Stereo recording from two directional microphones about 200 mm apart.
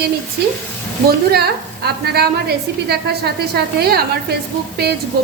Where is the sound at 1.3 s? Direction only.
55° right (ahead or behind).